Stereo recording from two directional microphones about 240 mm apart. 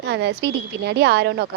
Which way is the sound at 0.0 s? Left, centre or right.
Right.